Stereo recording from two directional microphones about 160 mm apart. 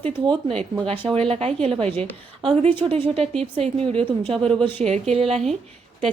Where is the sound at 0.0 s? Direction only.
35° right (ahead or behind).